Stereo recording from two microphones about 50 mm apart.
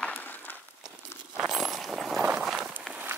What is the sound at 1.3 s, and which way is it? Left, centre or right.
Coin, centre.